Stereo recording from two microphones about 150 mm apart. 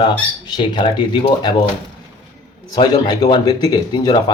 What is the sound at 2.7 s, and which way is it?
A man's voice, 30° left (ahead or behind).